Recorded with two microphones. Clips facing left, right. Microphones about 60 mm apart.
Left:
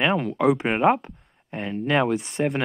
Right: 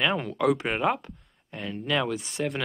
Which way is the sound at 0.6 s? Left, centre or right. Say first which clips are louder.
Left 6 dB; left.